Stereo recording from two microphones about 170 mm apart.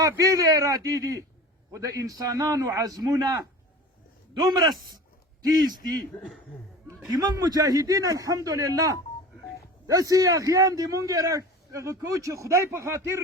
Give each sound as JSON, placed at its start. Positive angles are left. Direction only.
{"t": 0.0, "sound": "a man's voice", "side_deg": -20}
{"t": 4.4, "sound": "a man's voice", "side_deg": -25}
{"t": 6.1, "sound": "speech", "side_deg": 15}
{"t": 7.1, "sound": "a man's voice", "side_deg": -20}